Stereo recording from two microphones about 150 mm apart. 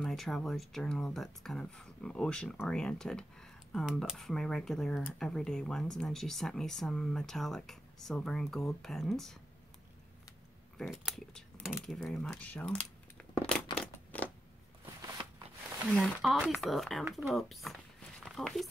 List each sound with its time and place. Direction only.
0.0 s speech: centre (ahead or behind)
10.8 s speech: centre (ahead or behind)
13.2 s crumpling: 5° left (ahead or behind)
13.7 s scissors: 10° left (ahead or behind)
15.0 s a sound: 20° right (ahead or behind)
15.9 s speech: centre (ahead or behind)